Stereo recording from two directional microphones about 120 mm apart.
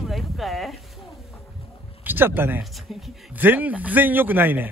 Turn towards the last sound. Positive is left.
turn(degrees=-15)  # may be behind; listen again after turning